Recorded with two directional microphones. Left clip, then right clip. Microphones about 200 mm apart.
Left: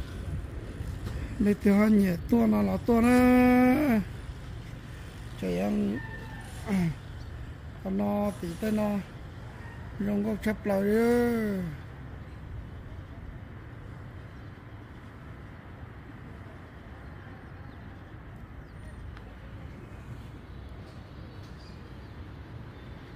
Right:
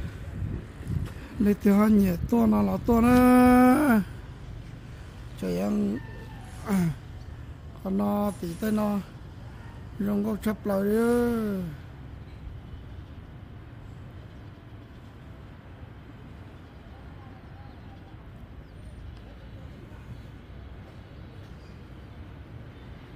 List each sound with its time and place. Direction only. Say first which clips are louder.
1.4 s speech: right 2 dB; 20° right (ahead or behind)
5.4 s speech: right 1 dB; 20° right (ahead or behind)
6.6 s a sound: right 3 dB; 25° right (ahead or behind)
7.8 s speech: right 2 dB; 25° right (ahead or behind)
10.0 s speech: right 1 dB; 25° right (ahead or behind)
10.8 s speech: right 1 dB; 10° right (ahead or behind)